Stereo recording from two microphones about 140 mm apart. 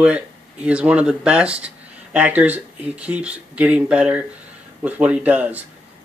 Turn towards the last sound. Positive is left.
turn(degrees=-10)  # may be behind; listen again after turning